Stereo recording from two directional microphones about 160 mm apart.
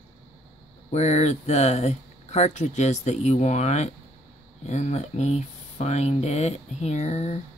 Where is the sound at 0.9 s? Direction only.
45° left (ahead or behind).